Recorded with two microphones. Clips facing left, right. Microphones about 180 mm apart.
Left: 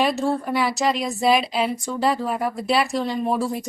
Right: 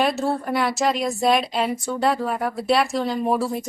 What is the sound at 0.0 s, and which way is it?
A woman's voice, centre (ahead or behind).